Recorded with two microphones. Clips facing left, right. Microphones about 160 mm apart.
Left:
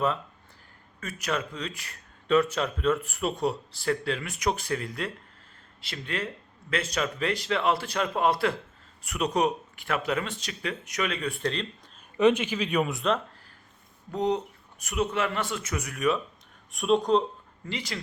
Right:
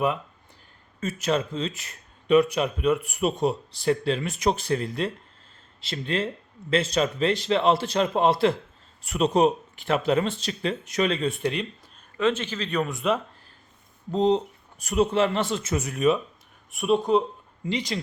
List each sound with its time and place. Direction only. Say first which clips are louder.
0.9 s speech: right 6 dB; 25° right (ahead or behind)
11.4 s speech: right 3 dB; 10° right (ahead or behind)
12.1 s speech: left 3 dB; 15° left (ahead or behind); by 13.1 s centre (ahead or behind)
14.1 s speech: right 5 dB; 25° right (ahead or behind)
16.7 s speech: right 1 dB; 5° right (ahead or behind)
17.7 s speech: right 7 dB; 20° right (ahead or behind)